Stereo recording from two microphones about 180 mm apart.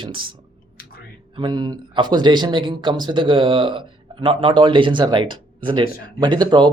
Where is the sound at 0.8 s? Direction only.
55° left (ahead or behind).